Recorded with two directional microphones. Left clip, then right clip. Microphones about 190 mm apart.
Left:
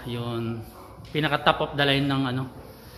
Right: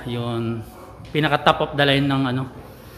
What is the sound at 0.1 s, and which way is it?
A man's voice, 15° right (ahead or behind).